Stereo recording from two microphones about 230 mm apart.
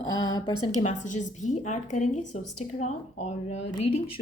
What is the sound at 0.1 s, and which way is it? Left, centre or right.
Speech, centre.